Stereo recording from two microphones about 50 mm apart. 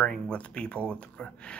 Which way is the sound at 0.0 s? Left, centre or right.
Centre.